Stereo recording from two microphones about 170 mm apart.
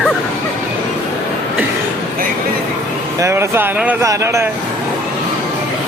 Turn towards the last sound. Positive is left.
turn(degrees=-15)  # may be behind; listen again after turning